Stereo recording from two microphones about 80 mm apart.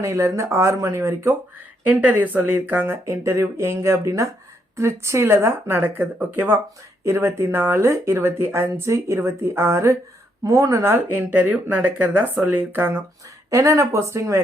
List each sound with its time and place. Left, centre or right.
0.0 s speech: right
1.8 s speech: centre
3.1 s speech: right
7.0 s speech: right
13.5 s speech: right